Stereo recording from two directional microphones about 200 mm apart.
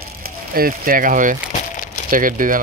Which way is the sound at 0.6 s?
45° right (ahead or behind).